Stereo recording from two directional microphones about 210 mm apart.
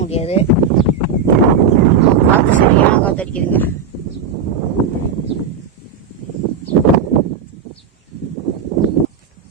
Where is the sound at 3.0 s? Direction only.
5° left (ahead or behind).